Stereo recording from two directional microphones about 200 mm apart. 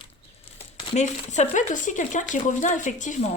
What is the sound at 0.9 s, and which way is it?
Speech, 35° left (ahead or behind).